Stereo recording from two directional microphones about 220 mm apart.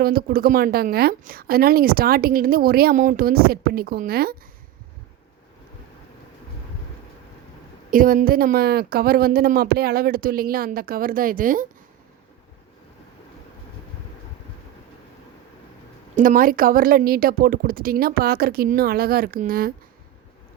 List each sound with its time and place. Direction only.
0.0 s a woman's voice: 45° right (ahead or behind)
7.9 s speech: 40° right (ahead or behind)
16.1 s speech: 40° right (ahead or behind)